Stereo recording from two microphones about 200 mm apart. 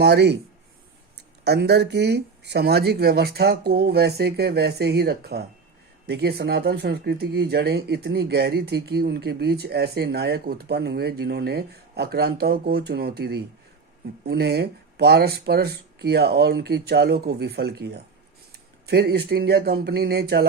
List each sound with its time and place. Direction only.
0.0 s speech: 55° right (ahead or behind)
1.5 s speech: 55° right (ahead or behind)